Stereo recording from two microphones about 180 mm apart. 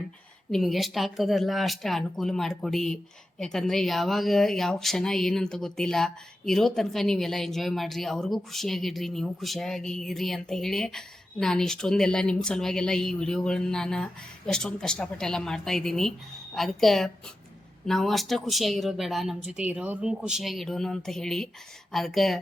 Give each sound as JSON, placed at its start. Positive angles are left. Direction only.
{"t": 0.5, "sound": "speech", "side_deg": 0}